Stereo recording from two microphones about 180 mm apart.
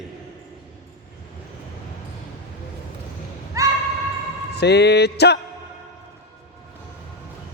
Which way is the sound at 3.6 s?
20° right (ahead or behind).